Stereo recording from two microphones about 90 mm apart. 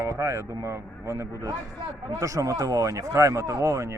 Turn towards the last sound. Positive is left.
turn(degrees=-35)  # may be behind; listen again after turning